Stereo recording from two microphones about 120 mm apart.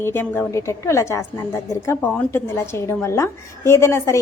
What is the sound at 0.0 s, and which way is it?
A woman's voice, 20° left (ahead or behind).